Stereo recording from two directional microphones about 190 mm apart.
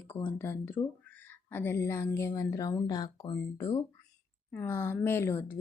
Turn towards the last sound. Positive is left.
turn(degrees=15)  # may be behind; listen again after turning